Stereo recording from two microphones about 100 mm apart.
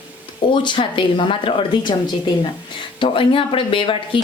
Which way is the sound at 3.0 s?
60° left (ahead or behind).